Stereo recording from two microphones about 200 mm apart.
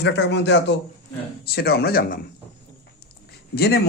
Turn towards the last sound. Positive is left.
turn(degrees=55)  # may be behind; listen again after turning